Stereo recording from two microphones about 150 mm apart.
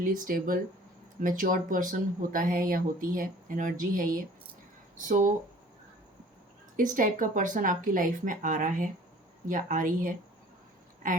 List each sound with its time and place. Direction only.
0.0 s speech: 65° right (ahead or behind)
6.7 s speech: 60° right (ahead or behind)